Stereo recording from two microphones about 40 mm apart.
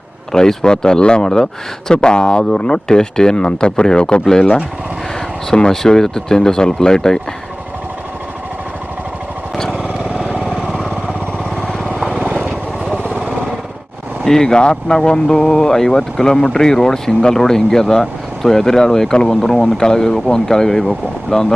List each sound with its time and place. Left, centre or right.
0.3 s speech: centre
9.6 s vehicle: centre
9.8 s vehicle: right
12.1 s vehicle: right
14.3 s speech: centre